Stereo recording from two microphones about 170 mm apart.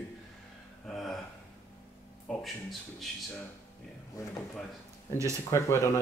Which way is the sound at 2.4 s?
Centre (ahead or behind).